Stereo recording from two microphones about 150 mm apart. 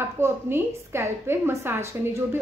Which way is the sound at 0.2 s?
15° right (ahead or behind).